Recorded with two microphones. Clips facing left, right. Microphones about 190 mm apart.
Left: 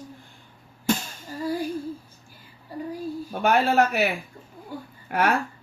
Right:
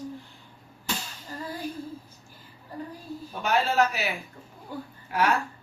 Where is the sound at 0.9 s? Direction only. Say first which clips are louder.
Left 10 dB; 50° left (ahead or behind).